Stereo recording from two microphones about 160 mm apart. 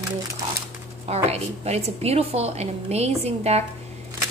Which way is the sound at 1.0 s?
40° right (ahead or behind).